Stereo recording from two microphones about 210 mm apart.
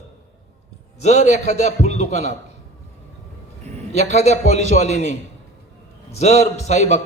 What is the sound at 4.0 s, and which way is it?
A man's voice, 30° left (ahead or behind).